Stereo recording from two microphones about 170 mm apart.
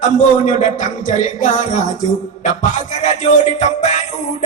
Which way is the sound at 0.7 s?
45° left (ahead or behind).